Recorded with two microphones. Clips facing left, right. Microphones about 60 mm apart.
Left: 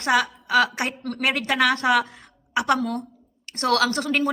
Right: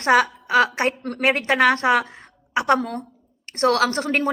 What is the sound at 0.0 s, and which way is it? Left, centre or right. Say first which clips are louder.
A woman's voice: right 4 dB; right.